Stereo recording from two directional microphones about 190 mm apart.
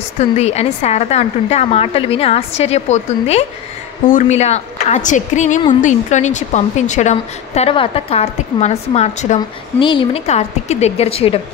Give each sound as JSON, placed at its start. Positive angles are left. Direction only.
{"t": 0.2, "sound": "a woman's voice", "side_deg": 35}